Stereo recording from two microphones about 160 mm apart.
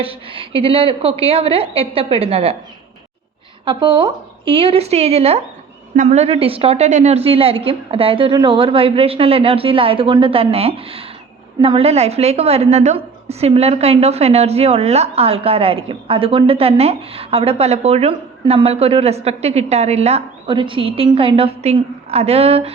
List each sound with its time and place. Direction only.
0.0 s a woman's voice: 35° right (ahead or behind)
3.7 s a woman's voice: 30° right (ahead or behind)